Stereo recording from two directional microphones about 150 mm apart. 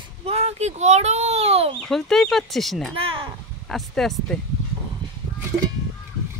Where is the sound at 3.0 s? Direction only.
35° right (ahead or behind).